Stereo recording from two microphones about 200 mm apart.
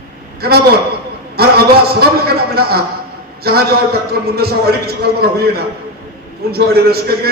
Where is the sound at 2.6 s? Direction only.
50° right (ahead or behind).